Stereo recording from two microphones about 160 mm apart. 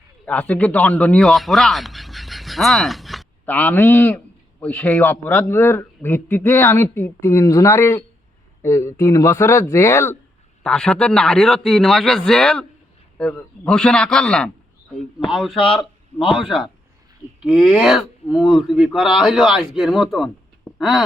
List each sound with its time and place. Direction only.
0.3 s a man's voice: 10° left (ahead or behind)
10.6 s speech: 5° left (ahead or behind)